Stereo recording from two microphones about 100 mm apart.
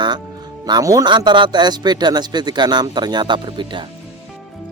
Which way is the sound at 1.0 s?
50° right (ahead or behind).